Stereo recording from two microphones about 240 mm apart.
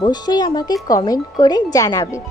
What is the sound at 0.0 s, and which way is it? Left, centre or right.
Speech, centre.